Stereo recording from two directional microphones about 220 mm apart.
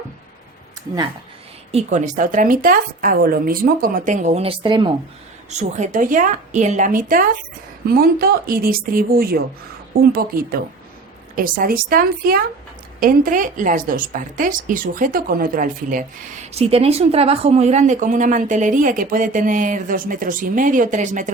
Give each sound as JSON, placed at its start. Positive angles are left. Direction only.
{"t": 1.7, "sound": "a woman's voice", "side_deg": -35}
{"t": 5.5, "sound": "a woman's voice", "side_deg": -30}
{"t": 16.5, "sound": "a woman's voice", "side_deg": -30}